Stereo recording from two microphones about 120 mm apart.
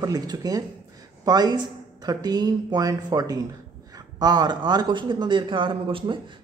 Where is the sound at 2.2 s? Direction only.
35° right (ahead or behind).